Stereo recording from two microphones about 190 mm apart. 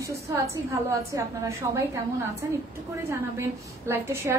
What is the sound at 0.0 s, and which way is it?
A woman's voice, 15° right (ahead or behind).